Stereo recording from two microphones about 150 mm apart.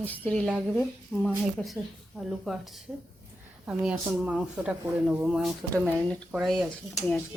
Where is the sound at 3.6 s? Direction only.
10° right (ahead or behind).